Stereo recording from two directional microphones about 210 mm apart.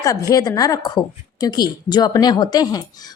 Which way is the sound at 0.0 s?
15° left (ahead or behind).